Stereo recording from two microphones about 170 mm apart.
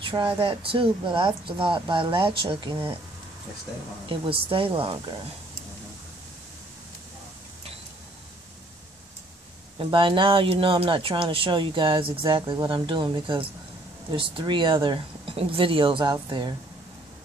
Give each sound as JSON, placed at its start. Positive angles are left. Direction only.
{"t": 0.0, "sound": "a sound", "side_deg": -30}
{"t": 0.4, "sound": "speech", "side_deg": -30}
{"t": 4.1, "sound": "speech", "side_deg": -30}
{"t": 9.8, "sound": "speech", "side_deg": -30}